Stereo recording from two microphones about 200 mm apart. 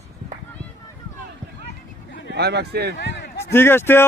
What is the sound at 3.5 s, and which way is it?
Speech, 10° left (ahead or behind).